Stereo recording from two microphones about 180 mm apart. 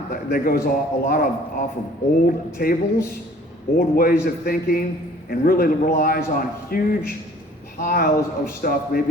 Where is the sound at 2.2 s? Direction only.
55° left (ahead or behind).